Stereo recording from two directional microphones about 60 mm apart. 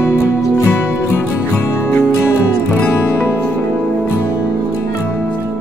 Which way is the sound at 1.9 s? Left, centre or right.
Left.